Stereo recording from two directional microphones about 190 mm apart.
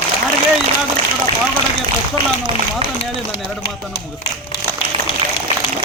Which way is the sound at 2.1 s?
25° right (ahead or behind).